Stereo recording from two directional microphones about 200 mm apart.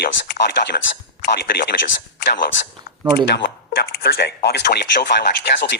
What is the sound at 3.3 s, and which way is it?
Speech, 55° left (ahead or behind).